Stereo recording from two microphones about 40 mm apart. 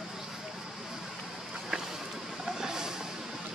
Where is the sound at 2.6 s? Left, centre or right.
Centre.